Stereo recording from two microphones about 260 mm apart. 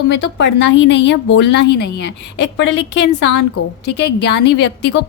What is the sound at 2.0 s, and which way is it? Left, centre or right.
A woman's voice, left.